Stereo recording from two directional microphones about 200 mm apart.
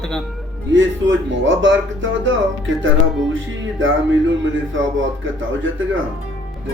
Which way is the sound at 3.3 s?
70° right (ahead or behind).